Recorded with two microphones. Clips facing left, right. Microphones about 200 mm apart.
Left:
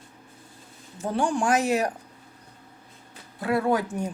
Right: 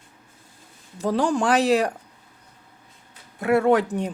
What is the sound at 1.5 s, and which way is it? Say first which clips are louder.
Speech: right 5 dB; 35° right (ahead or behind).